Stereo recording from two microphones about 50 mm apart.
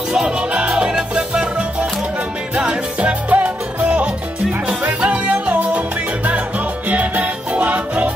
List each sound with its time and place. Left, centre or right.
0.1 s music: centre